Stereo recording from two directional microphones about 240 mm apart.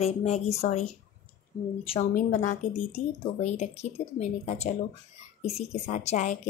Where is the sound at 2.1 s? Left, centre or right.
Left.